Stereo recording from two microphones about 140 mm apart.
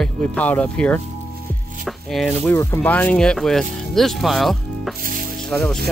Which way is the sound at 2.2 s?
15° left (ahead or behind).